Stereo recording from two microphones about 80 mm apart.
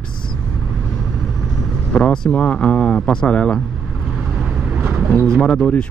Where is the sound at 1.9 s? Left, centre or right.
Centre.